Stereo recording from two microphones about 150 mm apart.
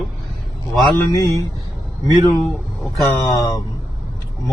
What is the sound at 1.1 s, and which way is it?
Speech, 20° left (ahead or behind).